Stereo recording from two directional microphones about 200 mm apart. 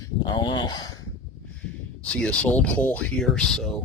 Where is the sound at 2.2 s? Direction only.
5° left (ahead or behind).